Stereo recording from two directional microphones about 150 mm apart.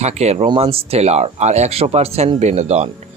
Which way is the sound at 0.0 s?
45° right (ahead or behind).